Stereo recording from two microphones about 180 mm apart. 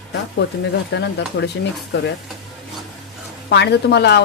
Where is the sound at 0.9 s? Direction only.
70° left (ahead or behind).